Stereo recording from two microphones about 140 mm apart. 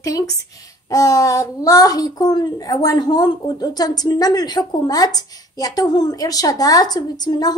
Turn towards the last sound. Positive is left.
turn(degrees=30)  # may be behind; listen again after turning